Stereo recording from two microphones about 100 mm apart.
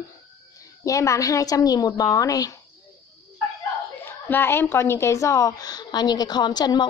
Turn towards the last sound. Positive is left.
turn(degrees=45)  # may be behind; listen again after turning